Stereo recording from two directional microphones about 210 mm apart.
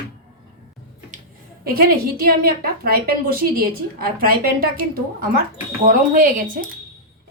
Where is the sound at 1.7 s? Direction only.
45° right (ahead or behind).